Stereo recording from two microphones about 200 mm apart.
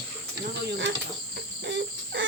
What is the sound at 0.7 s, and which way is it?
Speech, 65° right (ahead or behind).